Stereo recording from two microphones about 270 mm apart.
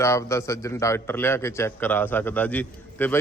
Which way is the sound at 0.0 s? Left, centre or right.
Centre.